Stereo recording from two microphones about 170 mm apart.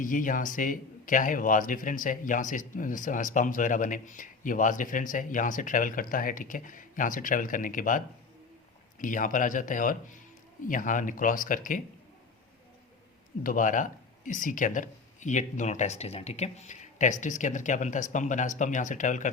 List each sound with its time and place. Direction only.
0.0 s a man's voice: 50° left (ahead or behind)
13.4 s a man's voice: 50° left (ahead or behind)